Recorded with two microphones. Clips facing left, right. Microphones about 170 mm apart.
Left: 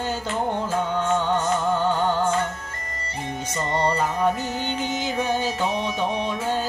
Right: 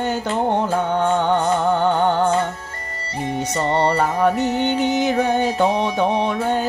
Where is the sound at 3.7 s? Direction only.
60° right (ahead or behind).